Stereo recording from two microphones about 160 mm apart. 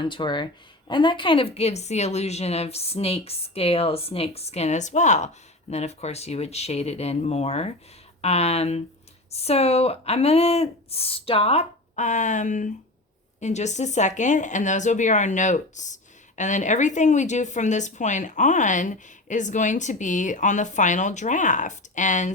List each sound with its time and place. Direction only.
0.0 s a woman's voice: 30° left (ahead or behind); by 22.3 s 50° left (ahead or behind)